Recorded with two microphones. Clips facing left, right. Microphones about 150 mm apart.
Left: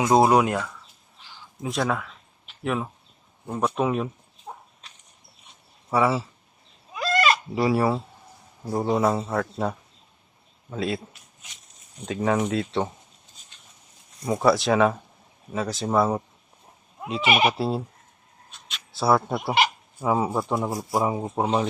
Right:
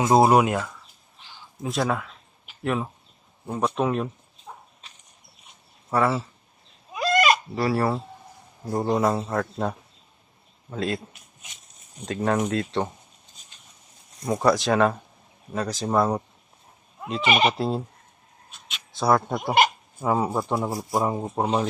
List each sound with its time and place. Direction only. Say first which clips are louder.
0.0 s speech: right 1 dB; 5° right (ahead or behind)
3.7 s speech: even; 5° left (ahead or behind)
5.9 s speech: left 1 dB; 10° left (ahead or behind)
6.9 s goat: right 2 dB; 15° right (ahead or behind)
7.5 s speech: left 2 dB; 15° left (ahead or behind)
12.0 s speech: even; centre (ahead or behind)
14.3 s speech: left 1 dB; centre (ahead or behind)